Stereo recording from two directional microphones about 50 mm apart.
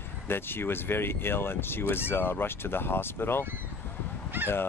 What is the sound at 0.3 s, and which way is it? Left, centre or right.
Speech, left.